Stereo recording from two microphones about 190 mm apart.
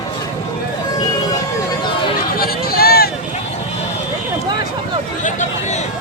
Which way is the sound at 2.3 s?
50° left (ahead or behind).